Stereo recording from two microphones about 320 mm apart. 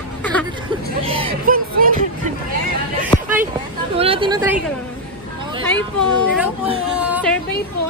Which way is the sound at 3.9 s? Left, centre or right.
Centre.